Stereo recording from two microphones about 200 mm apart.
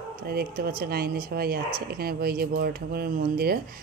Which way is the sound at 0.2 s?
50° right (ahead or behind).